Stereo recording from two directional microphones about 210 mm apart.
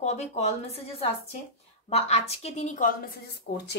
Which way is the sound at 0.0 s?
30° left (ahead or behind).